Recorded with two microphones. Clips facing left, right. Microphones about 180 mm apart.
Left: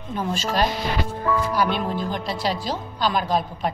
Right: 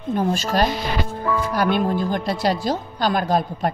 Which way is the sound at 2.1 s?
50° right (ahead or behind).